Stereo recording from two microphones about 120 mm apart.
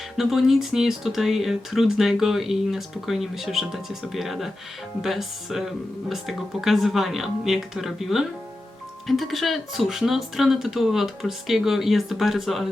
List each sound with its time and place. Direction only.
0.2 s speech: centre (ahead or behind)